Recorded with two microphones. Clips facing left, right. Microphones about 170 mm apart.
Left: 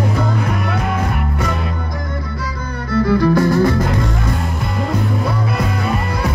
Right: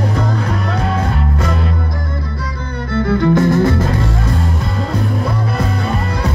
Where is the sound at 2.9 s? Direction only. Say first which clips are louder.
Even; 30° right (ahead or behind).